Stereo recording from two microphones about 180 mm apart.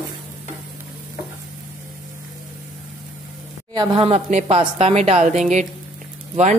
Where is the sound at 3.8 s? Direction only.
35° right (ahead or behind).